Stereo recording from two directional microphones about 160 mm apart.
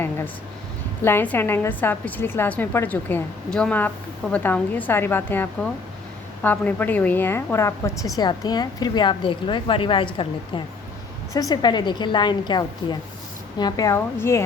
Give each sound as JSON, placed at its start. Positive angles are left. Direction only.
{"t": 1.0, "sound": "a woman's voice", "side_deg": 15}